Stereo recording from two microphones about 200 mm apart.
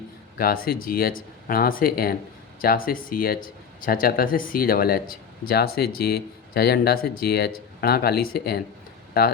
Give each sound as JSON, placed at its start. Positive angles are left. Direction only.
{"t": 0.3, "sound": "speech", "side_deg": 45}